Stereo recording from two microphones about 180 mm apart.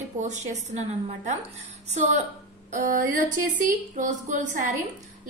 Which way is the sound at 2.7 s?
45° right (ahead or behind).